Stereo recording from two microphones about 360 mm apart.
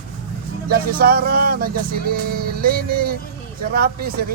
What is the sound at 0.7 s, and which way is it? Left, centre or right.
A man's voice, right.